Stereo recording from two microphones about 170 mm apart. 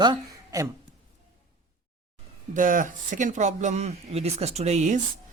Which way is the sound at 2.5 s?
50° right (ahead or behind).